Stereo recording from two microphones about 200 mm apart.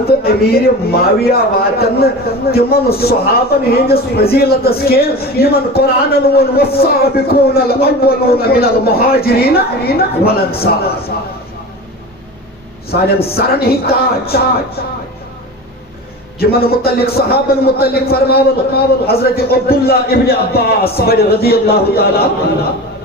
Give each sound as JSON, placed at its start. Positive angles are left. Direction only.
{"t": 0.2, "sound": "a man's voice", "side_deg": 50}
{"t": 12.9, "sound": "a man's voice", "side_deg": 50}
{"t": 16.4, "sound": "a man's voice", "side_deg": 50}